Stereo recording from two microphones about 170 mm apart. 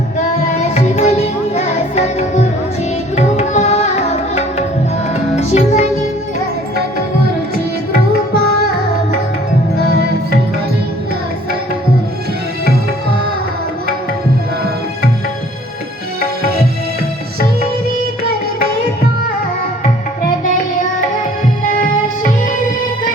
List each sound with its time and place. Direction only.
0.6 s music: 40° left (ahead or behind)
3.2 s tabla: 40° left (ahead or behind)
5.4 s music: 40° left (ahead or behind)